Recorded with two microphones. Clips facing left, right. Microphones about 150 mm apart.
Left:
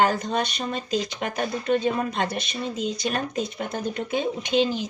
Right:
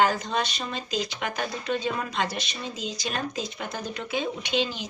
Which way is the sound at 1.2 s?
40° left (ahead or behind).